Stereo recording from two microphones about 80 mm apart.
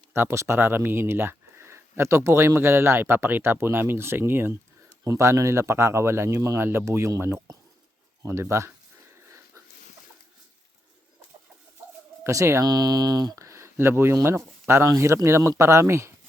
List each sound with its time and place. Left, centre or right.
0.1 s speech: right
12.2 s speech: right
12.6 s speech: right
13.3 s speech: right